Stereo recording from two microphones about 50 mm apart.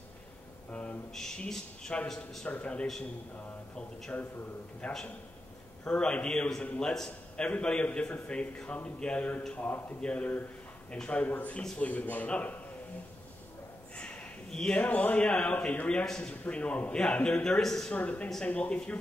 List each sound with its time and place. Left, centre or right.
0.7 s a sound: left
1.1 s speech: centre
2.4 s speech: left
4.1 s a man's voice: left
4.8 s speech: left
6.9 s a man's voice: centre
7.4 s speech: left
13.9 s a sound: left
14.8 s speech: left
17.6 s speech: centre
17.9 s speech: left